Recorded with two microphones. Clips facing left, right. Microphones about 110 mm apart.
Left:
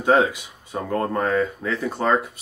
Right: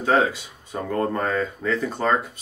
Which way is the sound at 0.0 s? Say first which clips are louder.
Left 2 dB; 15° left (ahead or behind).